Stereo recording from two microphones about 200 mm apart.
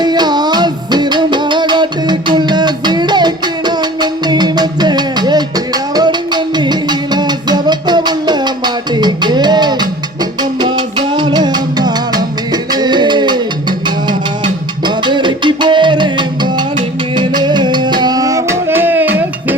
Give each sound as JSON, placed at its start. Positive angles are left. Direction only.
{"t": 0.0, "sound": "music", "side_deg": -20}